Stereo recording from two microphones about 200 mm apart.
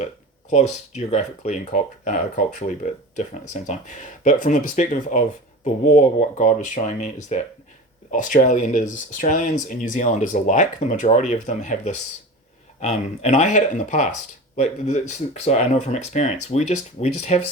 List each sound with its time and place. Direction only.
0.5 s speech: 35° left (ahead or behind)
12.8 s speech: 35° left (ahead or behind)